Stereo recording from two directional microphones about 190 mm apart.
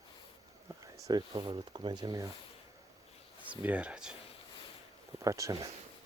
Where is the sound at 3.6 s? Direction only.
5° right (ahead or behind).